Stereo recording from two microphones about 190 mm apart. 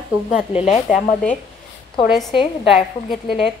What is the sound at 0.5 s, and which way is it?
Speech, 35° left (ahead or behind).